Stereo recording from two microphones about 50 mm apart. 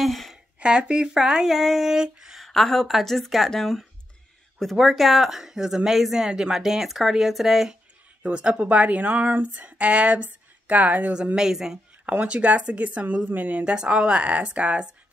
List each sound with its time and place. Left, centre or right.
0.0 s a sound: centre
0.6 s speech: right
1.5 s a woman's voice: centre
2.4 s a woman's voice: centre
8.2 s speech: right
11.3 s speech: centre
12.3 s speech: right
13.7 s speech: right